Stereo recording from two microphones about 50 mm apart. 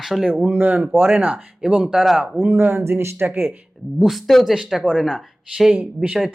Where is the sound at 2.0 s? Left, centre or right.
Centre.